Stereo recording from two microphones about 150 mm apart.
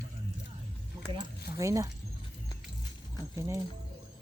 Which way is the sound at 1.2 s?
20° right (ahead or behind).